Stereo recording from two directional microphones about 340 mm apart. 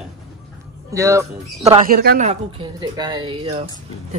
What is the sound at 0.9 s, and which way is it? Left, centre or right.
Speech, centre.